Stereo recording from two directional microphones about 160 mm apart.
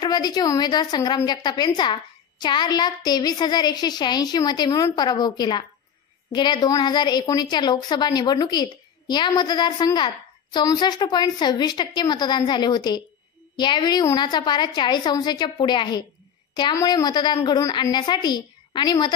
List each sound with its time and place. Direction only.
0.0 s a woman's voice: 25° left (ahead or behind)